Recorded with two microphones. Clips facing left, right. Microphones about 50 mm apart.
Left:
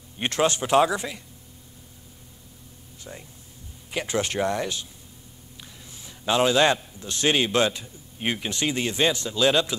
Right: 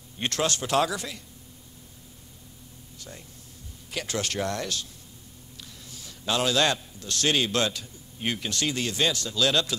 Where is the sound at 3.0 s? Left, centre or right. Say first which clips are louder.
Left 4 dB; left.